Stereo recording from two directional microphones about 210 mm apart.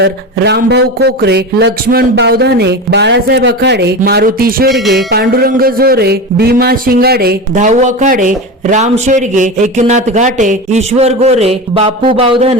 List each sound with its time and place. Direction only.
0.0 s speech: 50° right (ahead or behind); by 12.5 s 30° right (ahead or behind)